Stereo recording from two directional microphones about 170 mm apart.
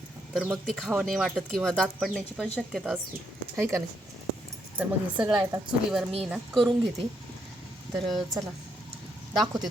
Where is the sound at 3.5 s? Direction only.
15° right (ahead or behind); by 6.7 s centre (ahead or behind).